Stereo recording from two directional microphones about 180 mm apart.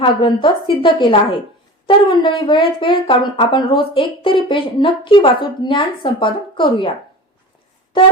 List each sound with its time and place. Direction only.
0.0 s speech: 25° left (ahead or behind)